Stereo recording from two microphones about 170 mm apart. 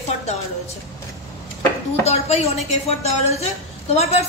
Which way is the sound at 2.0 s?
40° left (ahead or behind).